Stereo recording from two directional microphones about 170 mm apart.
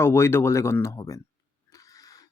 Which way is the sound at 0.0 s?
15° left (ahead or behind).